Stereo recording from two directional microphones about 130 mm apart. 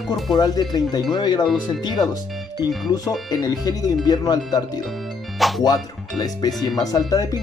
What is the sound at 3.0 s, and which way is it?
Speech, 30° left (ahead or behind).